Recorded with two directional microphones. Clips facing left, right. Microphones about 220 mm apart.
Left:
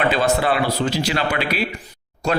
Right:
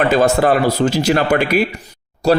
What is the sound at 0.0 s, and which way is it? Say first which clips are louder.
Speech: right 5 dB; 45° right (ahead or behind).